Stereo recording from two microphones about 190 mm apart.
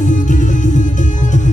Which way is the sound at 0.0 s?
40° left (ahead or behind).